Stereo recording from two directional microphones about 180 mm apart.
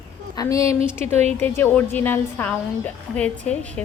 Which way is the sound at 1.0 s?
35° right (ahead or behind).